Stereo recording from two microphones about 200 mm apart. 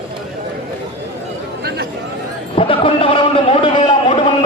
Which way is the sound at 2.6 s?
25° left (ahead or behind).